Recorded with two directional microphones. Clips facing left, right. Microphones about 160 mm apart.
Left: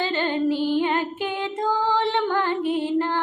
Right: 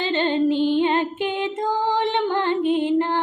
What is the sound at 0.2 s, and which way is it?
Music, 20° right (ahead or behind).